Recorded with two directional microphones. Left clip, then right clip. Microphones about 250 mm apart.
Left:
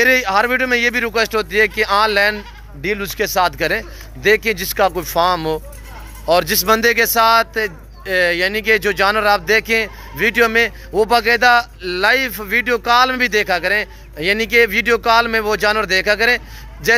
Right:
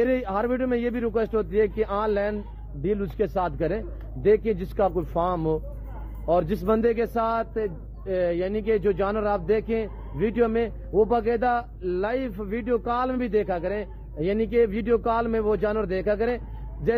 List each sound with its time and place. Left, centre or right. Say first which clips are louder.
0.1 s speech: left 11 dB; centre
4.9 s speech: left 9 dB; left
6.3 s speech: left 9 dB; centre